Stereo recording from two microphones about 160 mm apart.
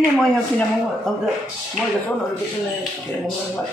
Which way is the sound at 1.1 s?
Centre (ahead or behind).